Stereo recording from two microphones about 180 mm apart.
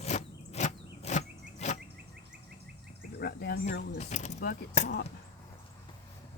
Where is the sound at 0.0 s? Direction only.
40° left (ahead or behind).